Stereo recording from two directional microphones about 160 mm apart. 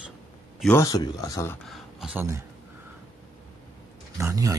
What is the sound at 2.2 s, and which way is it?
Speech, 20° right (ahead or behind).